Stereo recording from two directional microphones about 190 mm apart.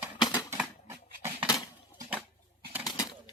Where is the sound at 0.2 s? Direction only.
25° left (ahead or behind).